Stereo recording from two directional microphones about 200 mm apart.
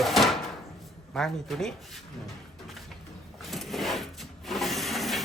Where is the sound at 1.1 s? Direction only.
Centre (ahead or behind).